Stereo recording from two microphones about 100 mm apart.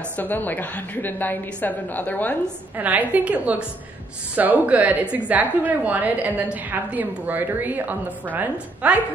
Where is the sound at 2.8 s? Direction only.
15° right (ahead or behind).